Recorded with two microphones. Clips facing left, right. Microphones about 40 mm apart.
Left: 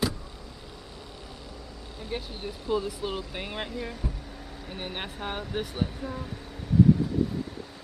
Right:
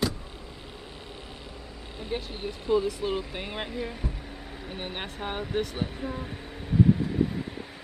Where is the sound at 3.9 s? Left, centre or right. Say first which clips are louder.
Even; centre.